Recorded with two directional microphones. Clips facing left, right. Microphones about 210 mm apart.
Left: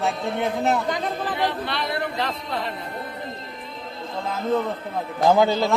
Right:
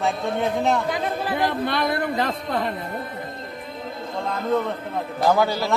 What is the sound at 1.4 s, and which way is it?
Speech, 50° right (ahead or behind).